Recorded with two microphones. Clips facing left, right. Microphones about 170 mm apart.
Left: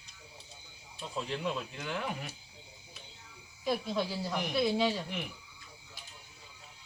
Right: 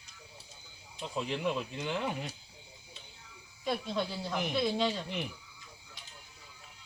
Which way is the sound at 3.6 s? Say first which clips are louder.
Left 1 dB; 5° left (ahead or behind).